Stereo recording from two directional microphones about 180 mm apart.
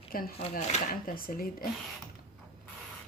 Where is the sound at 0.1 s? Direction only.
55° left (ahead or behind).